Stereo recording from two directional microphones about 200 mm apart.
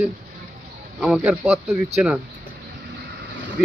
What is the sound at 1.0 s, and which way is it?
Speech, 5° right (ahead or behind).